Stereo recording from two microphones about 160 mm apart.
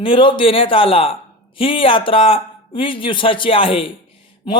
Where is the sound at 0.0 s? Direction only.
30° left (ahead or behind).